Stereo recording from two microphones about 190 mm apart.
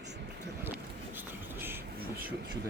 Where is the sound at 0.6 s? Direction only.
10° right (ahead or behind).